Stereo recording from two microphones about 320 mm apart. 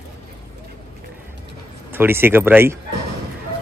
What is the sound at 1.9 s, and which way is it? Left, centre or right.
Speech, centre.